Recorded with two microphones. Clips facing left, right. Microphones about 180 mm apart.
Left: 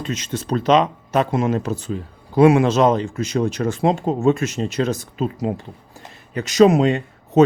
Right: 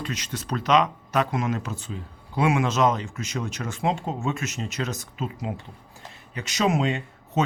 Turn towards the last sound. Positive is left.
turn(degrees=35)  # may be behind; listen again after turning